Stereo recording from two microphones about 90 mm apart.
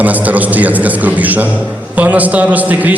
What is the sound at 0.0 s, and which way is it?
A man's voice, 20° right (ahead or behind).